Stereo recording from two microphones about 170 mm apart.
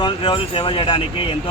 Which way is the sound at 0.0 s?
30° left (ahead or behind).